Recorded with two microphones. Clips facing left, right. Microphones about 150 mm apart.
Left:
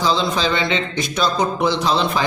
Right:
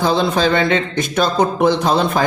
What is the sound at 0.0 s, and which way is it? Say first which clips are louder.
A man's voice: right 4 dB; 55° right (ahead or behind).